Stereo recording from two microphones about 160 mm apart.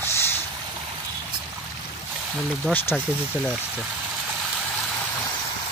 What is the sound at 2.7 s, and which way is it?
Speech, 10° left (ahead or behind).